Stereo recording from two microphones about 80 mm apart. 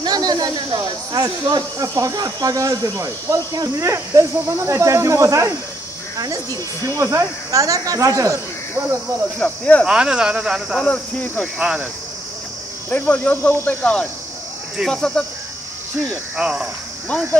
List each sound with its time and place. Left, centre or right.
0.0 s speech: right
6.9 s speech: right
9.4 s speech: centre
9.8 s speech: centre
10.9 s cricket: centre
11.5 s speech: centre
12.9 s speech: centre
14.9 s cricket: centre
16.3 s speech: centre